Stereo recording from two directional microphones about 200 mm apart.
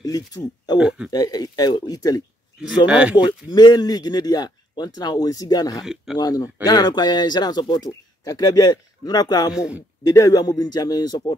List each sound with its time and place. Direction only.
0.0 s speech: 20° left (ahead or behind)
0.7 s speech: 5° right (ahead or behind)
1.1 s speech: 20° left (ahead or behind)
2.9 s speech: 5° right (ahead or behind)
3.2 s speech: 20° left (ahead or behind)
9.5 s speech: 5° right (ahead or behind)
10.0 s speech: 15° left (ahead or behind)